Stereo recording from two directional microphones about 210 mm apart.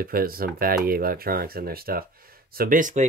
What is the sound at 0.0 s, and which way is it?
Speech, 45° right (ahead or behind).